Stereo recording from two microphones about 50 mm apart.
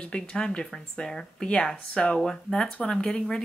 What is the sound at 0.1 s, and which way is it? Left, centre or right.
Speech, centre.